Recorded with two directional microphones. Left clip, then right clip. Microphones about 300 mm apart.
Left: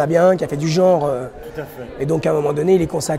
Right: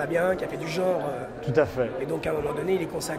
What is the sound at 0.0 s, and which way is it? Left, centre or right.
Speech, left.